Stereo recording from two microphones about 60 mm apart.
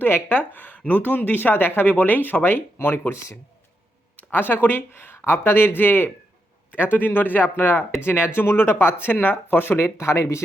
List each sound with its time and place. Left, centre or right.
0.3 s speech: left
4.2 s speech: left
6.7 s a man's voice: right
6.9 s speech: left